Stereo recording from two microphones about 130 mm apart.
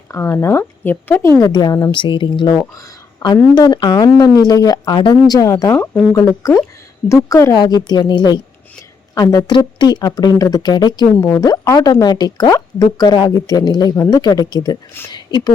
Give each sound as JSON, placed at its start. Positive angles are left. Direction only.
{"t": 0.1, "sound": "speech", "side_deg": 15}
{"t": 1.4, "sound": "speech", "side_deg": 30}
{"t": 2.6, "sound": "speech", "side_deg": 25}